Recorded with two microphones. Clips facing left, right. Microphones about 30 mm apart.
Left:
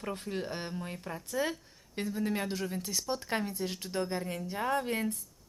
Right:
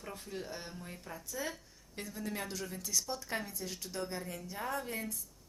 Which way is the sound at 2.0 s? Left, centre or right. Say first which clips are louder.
Left 7 dB; left.